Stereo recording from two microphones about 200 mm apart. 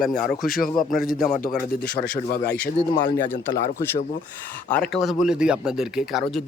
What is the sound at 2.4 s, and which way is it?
Speech, 5° left (ahead or behind).